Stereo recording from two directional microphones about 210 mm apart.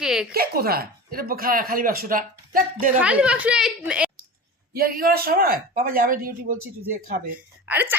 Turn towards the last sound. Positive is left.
turn(degrees=-10)  # may be behind; listen again after turning